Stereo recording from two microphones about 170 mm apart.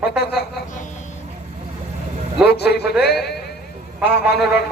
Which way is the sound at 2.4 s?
75° left (ahead or behind).